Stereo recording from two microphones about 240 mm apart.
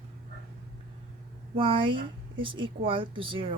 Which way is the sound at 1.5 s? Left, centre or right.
Right.